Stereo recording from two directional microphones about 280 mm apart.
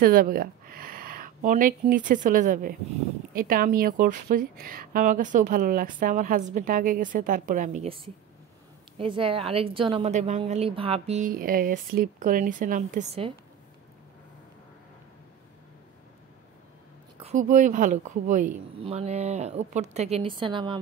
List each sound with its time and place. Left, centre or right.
0.0 s a woman's voice: right
17.2 s a woman's voice: right